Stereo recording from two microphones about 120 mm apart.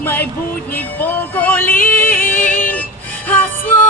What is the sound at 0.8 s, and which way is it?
Music, 15° left (ahead or behind).